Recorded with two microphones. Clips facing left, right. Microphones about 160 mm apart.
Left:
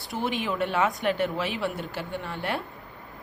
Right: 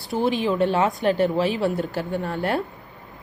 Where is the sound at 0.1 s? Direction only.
35° right (ahead or behind).